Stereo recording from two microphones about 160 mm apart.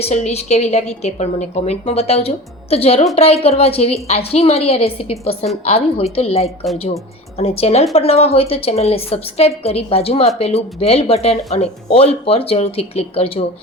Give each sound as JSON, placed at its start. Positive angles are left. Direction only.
{"t": 0.0, "sound": "a woman's voice", "side_deg": 45}